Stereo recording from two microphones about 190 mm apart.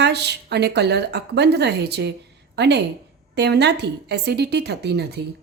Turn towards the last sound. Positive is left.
turn(degrees=-60)  # may be behind; listen again after turning